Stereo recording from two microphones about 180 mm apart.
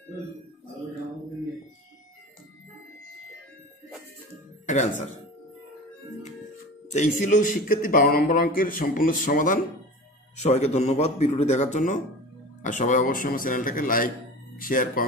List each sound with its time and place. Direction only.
4.6 s speech: 40° left (ahead or behind)
6.9 s a man's voice: 45° left (ahead or behind)
10.3 s a man's voice: 40° left (ahead or behind)